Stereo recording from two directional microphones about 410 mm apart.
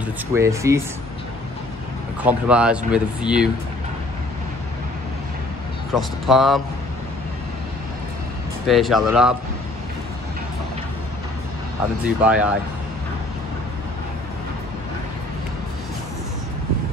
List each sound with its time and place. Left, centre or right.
0.3 s speech: centre
2.2 s speech: centre
5.9 s speech: centre
8.6 s speech: centre
12.2 s speech: centre